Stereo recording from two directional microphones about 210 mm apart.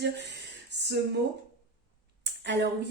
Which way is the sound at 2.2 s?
55° right (ahead or behind).